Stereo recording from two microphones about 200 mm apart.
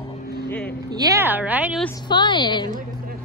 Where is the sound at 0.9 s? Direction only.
15° right (ahead or behind).